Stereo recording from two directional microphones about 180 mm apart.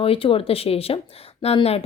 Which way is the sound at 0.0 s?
30° left (ahead or behind).